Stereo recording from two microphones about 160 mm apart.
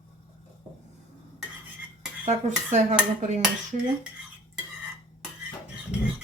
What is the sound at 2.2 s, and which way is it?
Speech, 50° right (ahead or behind).